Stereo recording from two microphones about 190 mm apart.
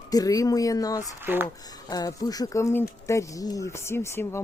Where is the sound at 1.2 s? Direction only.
10° right (ahead or behind).